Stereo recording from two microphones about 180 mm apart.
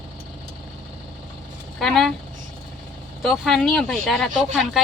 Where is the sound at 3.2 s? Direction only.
Centre (ahead or behind).